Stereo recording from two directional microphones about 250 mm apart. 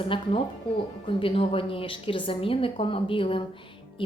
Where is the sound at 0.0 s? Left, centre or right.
Left.